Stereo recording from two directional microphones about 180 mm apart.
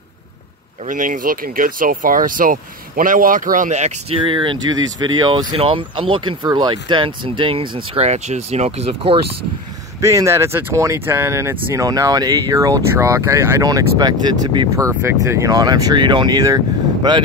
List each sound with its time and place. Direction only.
0.8 s speech: 45° right (ahead or behind)
4.2 s speech: 25° right (ahead or behind)
9.9 s speech: 15° right (ahead or behind)